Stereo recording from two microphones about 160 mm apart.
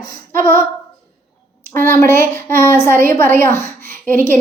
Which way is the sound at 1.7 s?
15° left (ahead or behind).